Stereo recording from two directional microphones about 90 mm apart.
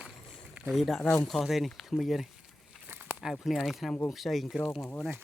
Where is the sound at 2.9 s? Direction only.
20° right (ahead or behind).